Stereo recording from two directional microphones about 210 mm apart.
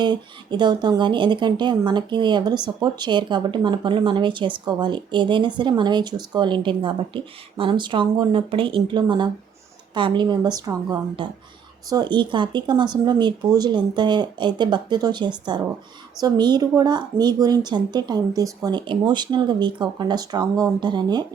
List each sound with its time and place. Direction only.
0.0 s speech: 20° right (ahead or behind)